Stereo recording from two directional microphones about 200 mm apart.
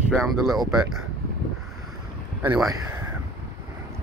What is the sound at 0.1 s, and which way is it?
Speech, centre (ahead or behind).